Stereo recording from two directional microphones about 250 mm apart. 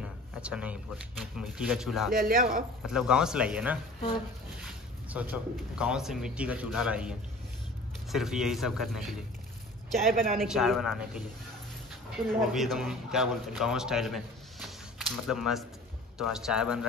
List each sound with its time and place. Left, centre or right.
0.0 s speech: centre
2.1 s speech: right
2.9 s speech: centre
5.1 s speech: centre